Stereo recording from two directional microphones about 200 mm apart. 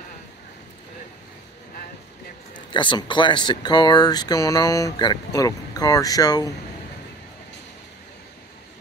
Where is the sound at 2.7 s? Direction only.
25° left (ahead or behind).